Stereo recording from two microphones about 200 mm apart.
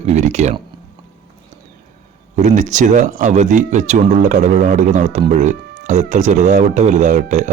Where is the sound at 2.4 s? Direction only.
35° right (ahead or behind).